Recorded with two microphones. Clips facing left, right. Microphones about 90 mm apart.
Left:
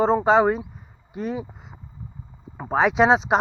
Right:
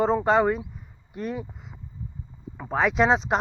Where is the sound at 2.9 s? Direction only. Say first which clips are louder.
Left 3 dB; centre (ahead or behind).